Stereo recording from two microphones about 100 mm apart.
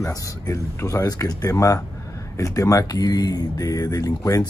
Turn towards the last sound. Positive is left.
turn(degrees=35)  # may be behind; listen again after turning